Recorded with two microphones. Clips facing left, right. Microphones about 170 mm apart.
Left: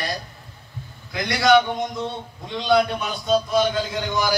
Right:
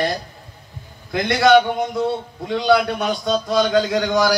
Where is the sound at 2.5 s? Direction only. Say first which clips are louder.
Right 3 dB; 70° right (ahead or behind); by 4.3 s 90° right.